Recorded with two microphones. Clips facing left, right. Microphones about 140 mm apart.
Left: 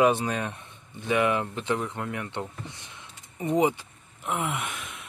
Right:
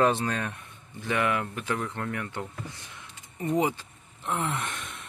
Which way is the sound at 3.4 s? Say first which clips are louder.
Left 3 dB; 20° left (ahead or behind).